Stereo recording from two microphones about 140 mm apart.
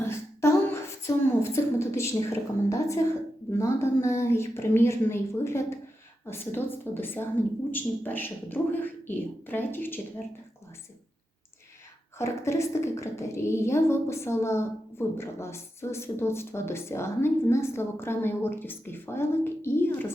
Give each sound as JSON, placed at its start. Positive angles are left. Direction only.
{"t": 0.0, "sound": "a sound", "side_deg": 20}
{"t": 2.6, "sound": "a woman's voice", "side_deg": 20}
{"t": 12.1, "sound": "a woman's voice", "side_deg": 20}